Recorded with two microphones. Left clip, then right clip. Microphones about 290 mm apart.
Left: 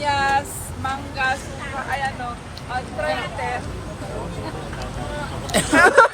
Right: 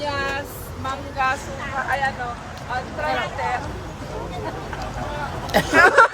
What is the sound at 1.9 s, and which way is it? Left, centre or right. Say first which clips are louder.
Speech: right 2 dB; right.